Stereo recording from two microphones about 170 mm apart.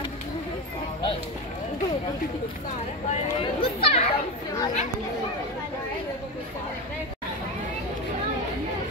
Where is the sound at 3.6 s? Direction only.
35° left (ahead or behind).